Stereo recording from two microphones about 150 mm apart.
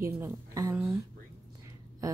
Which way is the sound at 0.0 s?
20° right (ahead or behind).